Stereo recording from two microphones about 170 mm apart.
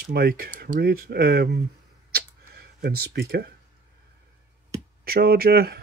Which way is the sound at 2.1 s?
65° right (ahead or behind).